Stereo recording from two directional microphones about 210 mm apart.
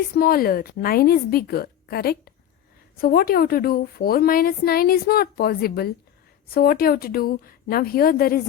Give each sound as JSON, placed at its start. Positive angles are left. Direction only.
{"t": 0.2, "sound": "a woman's voice", "side_deg": 45}